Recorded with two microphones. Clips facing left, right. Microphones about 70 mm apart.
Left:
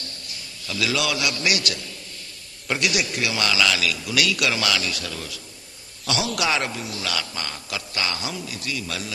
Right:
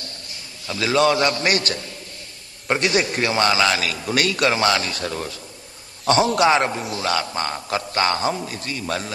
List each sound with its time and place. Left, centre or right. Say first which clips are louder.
0.7 s a man's voice: right 7 dB; right